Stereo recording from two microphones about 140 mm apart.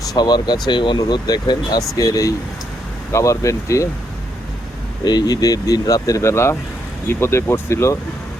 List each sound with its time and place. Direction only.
0.0 s speech: 30° left (ahead or behind)
5.0 s speech: 30° left (ahead or behind)